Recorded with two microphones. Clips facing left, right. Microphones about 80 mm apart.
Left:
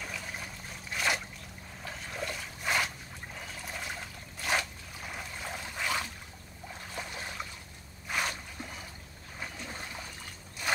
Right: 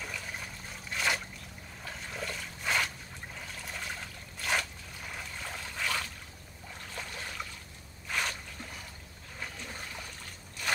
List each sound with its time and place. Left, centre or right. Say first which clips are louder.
0.0 s trickle: even; centre
6.7 s boat: left 2 dB; centre
8.1 s a sound: left 1 dB; centre
9.4 s boat: left 1 dB; centre